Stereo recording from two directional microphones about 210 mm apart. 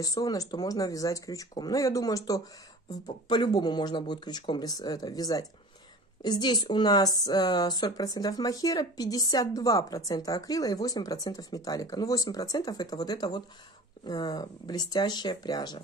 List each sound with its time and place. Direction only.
0.0 s speech: 15° left (ahead or behind)